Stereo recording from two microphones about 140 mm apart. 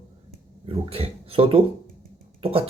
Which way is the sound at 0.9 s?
45° right (ahead or behind).